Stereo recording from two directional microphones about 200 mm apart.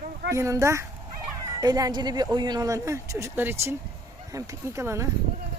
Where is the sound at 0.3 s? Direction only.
15° right (ahead or behind).